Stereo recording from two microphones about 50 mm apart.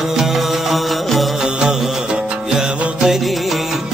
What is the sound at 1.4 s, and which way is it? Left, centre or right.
Music, centre.